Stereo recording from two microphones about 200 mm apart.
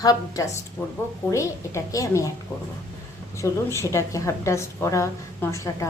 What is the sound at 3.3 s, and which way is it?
A woman's voice, 15° left (ahead or behind).